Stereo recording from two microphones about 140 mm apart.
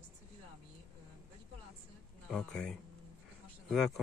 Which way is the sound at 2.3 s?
5° left (ahead or behind).